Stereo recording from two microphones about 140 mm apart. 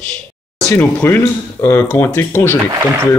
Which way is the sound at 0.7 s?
15° left (ahead or behind).